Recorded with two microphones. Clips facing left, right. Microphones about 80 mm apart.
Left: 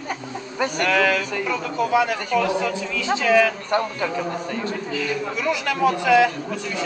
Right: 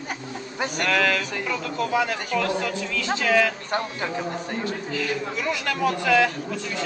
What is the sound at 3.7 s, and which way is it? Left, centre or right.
Speech, centre.